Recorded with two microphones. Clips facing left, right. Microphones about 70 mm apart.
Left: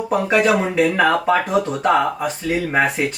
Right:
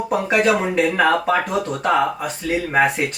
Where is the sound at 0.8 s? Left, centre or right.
Centre.